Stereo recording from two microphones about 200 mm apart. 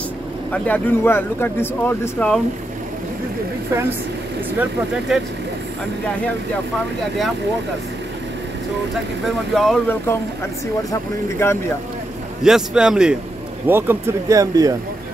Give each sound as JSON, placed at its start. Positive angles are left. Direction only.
{"t": 0.5, "sound": "speech", "side_deg": 10}
{"t": 9.5, "sound": "speech", "side_deg": 0}
{"t": 12.4, "sound": "speech", "side_deg": -5}